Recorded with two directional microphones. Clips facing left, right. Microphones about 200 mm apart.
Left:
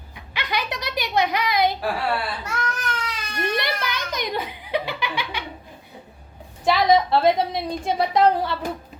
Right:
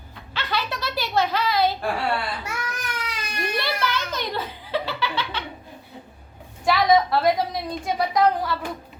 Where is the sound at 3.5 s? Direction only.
15° left (ahead or behind).